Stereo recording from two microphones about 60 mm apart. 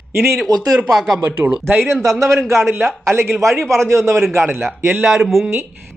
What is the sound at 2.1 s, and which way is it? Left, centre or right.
Speech, right.